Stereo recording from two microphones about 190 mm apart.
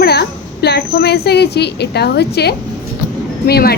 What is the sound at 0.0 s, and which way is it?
A woman's voice, 60° left (ahead or behind).